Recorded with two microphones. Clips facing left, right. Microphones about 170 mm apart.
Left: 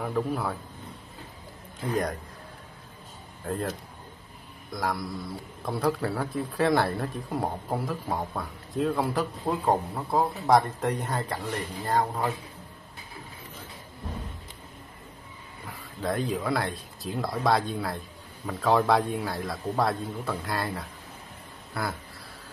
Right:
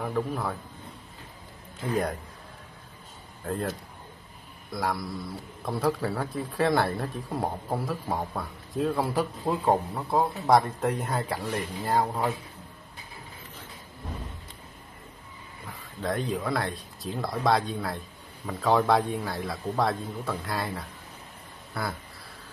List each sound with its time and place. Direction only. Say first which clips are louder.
0.0 s a man's voice: left 1 dB; centre (ahead or behind)
3.4 s a man's voice: even; centre (ahead or behind)
16.0 s a man's voice: left 1 dB; centre (ahead or behind)